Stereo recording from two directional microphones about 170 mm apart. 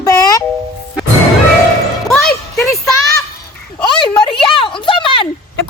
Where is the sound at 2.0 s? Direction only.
Centre (ahead or behind).